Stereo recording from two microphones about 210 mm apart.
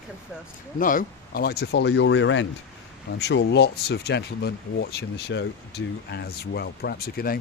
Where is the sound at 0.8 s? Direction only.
40° left (ahead or behind); by 2.5 s 65° left (ahead or behind).